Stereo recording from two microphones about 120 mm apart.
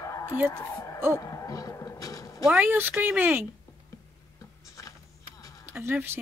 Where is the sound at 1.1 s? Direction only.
30° left (ahead or behind).